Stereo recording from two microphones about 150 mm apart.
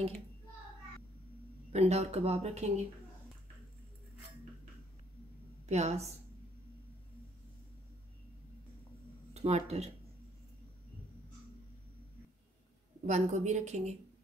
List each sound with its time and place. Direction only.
1.7 s speech: 45° right (ahead or behind)
5.7 s speech: 50° right (ahead or behind)
9.3 s speech: 45° right (ahead or behind)
13.0 s speech: 50° right (ahead or behind)